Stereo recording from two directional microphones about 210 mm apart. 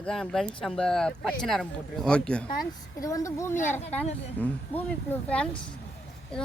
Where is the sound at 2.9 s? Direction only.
15° left (ahead or behind).